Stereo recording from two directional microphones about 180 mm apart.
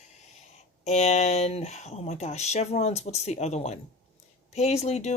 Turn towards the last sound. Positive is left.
turn(degrees=40)  # may be behind; listen again after turning